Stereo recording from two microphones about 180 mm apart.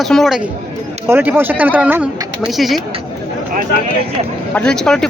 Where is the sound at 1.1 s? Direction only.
10° right (ahead or behind).